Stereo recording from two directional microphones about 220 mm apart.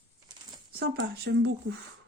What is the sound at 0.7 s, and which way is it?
Speech, 45° right (ahead or behind).